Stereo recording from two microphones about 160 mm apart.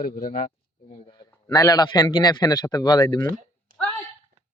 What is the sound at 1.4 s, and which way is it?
A man's voice, 20° left (ahead or behind).